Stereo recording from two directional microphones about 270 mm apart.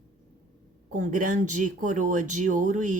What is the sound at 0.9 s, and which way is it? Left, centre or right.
Speech, right.